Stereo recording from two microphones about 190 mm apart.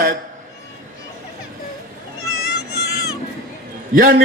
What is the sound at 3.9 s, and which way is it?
Speech, 50° right (ahead or behind).